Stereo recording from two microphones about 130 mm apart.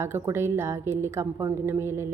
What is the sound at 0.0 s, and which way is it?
A woman's voice, 20° right (ahead or behind).